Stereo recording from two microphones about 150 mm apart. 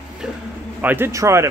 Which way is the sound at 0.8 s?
15° right (ahead or behind).